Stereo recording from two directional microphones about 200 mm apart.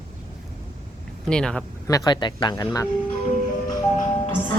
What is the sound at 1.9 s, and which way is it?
Speech, 20° left (ahead or behind).